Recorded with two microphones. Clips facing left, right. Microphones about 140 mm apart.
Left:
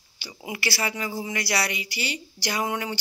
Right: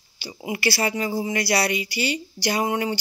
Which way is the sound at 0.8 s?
30° right (ahead or behind).